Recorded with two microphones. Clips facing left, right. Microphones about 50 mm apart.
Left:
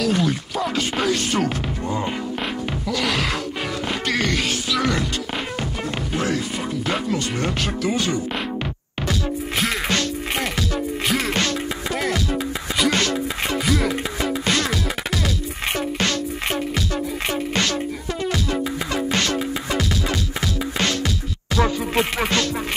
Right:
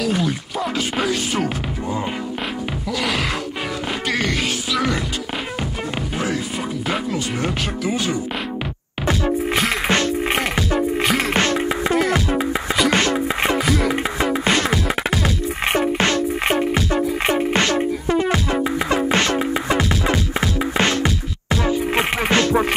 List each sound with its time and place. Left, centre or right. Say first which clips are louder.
1.0 s music: left 2 dB; centre
9.8 s music: right 4 dB; right
11.3 s music: right 5 dB; right
13.7 s music: right 2 dB; centre
14.2 s music: right 3 dB; right